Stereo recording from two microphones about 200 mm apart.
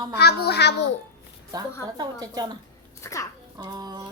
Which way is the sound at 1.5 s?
20° right (ahead or behind).